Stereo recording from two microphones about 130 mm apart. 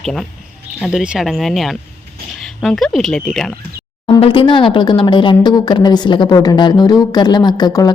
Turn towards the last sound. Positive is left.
turn(degrees=30)  # may be behind; listen again after turning